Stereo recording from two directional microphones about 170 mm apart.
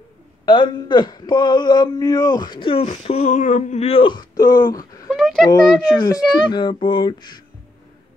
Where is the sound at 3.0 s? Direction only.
40° left (ahead or behind); by 5.1 s 20° left (ahead or behind).